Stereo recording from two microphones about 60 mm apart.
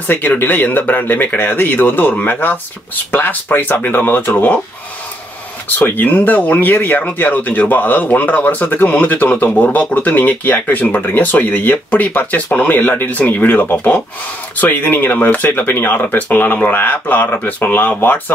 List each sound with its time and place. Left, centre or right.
0.1 s speech: left
5.8 s speech: left